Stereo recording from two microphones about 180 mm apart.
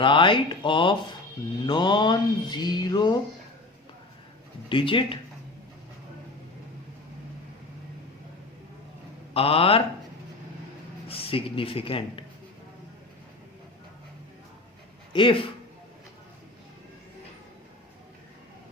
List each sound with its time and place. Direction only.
0.0 s speech: 30° left (ahead or behind)
4.7 s speech: 30° left (ahead or behind)
9.3 s speech: 30° left (ahead or behind)
11.1 s speech: 30° left (ahead or behind)
15.1 s speech: 30° left (ahead or behind)